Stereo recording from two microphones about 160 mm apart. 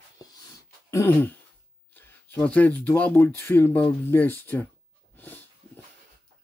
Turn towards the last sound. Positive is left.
turn(degrees=10)  # may be behind; listen again after turning